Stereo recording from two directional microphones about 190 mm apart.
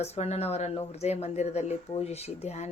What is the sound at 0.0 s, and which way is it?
Speech, 35° left (ahead or behind).